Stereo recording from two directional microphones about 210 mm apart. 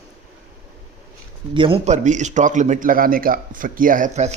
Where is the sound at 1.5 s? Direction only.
25° right (ahead or behind).